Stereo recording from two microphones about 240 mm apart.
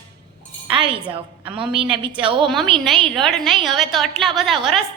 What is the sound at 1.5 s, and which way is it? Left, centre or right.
Speech, right.